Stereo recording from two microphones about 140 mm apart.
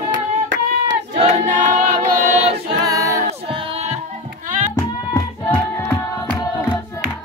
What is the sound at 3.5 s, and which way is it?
Music, 40° right (ahead or behind).